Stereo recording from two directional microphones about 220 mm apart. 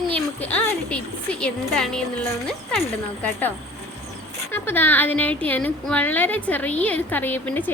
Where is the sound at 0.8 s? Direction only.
5° left (ahead or behind).